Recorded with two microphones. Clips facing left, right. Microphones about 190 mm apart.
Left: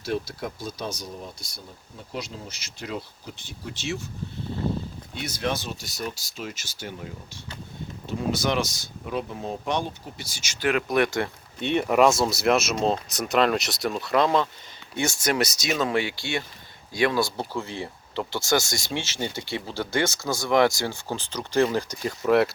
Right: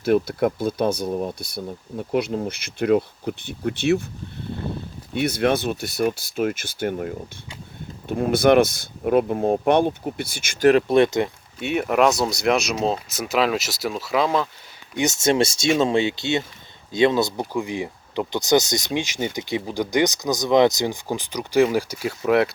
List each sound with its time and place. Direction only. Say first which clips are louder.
0.0 s speech: right 10 dB; 55° right (ahead or behind)
5.2 s speech: right 9 dB; 60° right (ahead or behind)
10.7 s speech: right 7 dB; 30° right (ahead or behind)
11.6 s speech: right 1 dB; 5° right (ahead or behind)
14.9 s speech: right 5 dB; 20° right (ahead or behind); by 22.5 s centre (ahead or behind)